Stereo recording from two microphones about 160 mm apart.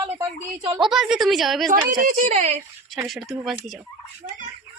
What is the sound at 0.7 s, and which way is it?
Speech, centre (ahead or behind).